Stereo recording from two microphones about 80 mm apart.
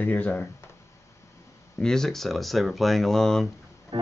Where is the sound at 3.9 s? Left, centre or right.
Right.